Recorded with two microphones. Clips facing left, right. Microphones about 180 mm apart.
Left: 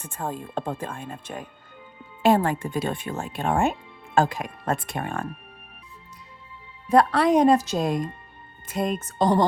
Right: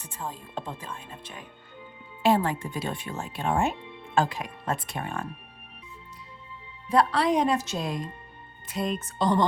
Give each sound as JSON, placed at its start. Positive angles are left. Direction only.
{"t": 0.0, "sound": "speech", "side_deg": 50}
{"t": 6.8, "sound": "speech", "side_deg": 50}